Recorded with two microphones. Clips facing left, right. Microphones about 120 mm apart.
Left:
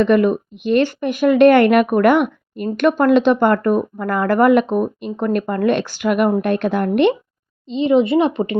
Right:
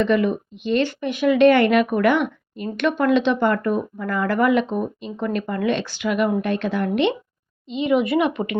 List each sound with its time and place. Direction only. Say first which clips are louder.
0.0 s speech: left 5 dB; 50° left (ahead or behind)
7.7 s speech: left 5 dB; 30° left (ahead or behind)